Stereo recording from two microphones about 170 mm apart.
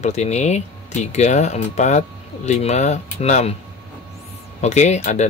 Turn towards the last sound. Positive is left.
turn(degrees=40)  # may be behind; listen again after turning